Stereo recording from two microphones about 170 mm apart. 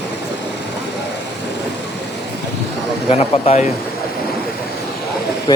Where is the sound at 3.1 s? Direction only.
35° left (ahead or behind).